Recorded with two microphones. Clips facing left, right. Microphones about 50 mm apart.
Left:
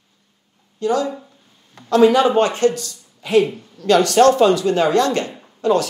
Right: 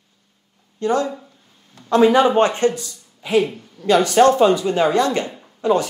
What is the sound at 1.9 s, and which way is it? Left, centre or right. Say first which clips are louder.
A man's voice: left 1 dB; right.